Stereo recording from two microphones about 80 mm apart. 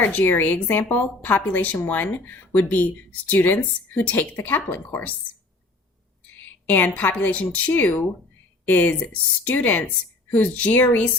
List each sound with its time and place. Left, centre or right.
0.0 s a woman's voice: left
6.3 s a woman's voice: left